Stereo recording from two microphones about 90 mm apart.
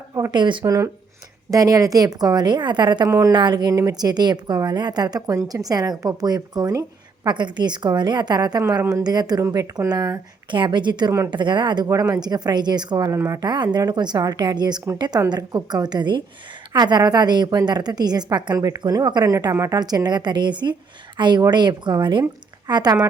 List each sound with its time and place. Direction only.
0.3 s a woman's voice: 60° right (ahead or behind)
0.6 s a woman's voice: 35° right (ahead or behind); by 3.1 s 55° right (ahead or behind)
3.1 s speech: 35° right (ahead or behind)
3.3 s a woman's voice: 55° right (ahead or behind)
13.1 s speech: 30° right (ahead or behind)
13.4 s a woman's voice: 55° right (ahead or behind)
22.2 s a woman's voice: 45° right (ahead or behind)